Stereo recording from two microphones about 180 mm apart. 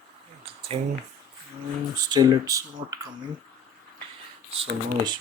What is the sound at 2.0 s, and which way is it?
Speech, 20° right (ahead or behind).